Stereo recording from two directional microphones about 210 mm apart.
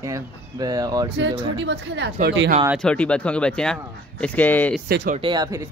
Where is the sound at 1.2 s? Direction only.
60° right (ahead or behind).